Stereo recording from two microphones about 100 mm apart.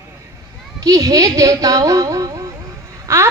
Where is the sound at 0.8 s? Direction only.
35° right (ahead or behind).